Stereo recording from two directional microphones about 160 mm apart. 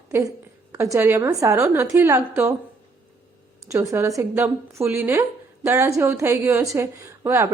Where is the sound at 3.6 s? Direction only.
15° right (ahead or behind).